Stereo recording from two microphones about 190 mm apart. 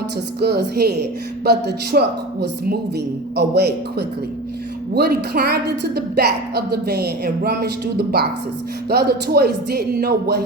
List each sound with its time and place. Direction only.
0.3 s a woman's voice: 55° right (ahead or behind)